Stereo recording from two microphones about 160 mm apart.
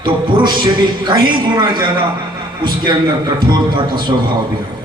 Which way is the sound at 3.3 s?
30° right (ahead or behind).